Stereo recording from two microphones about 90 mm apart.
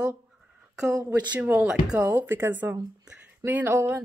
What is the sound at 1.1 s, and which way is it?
A woman's voice, 20° right (ahead or behind).